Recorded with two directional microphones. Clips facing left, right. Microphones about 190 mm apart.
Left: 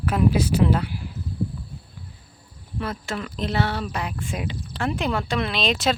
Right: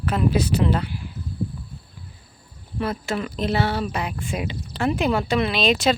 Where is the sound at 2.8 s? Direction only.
10° right (ahead or behind).